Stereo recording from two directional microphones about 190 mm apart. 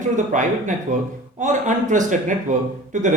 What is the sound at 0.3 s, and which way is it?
Speech, 40° right (ahead or behind).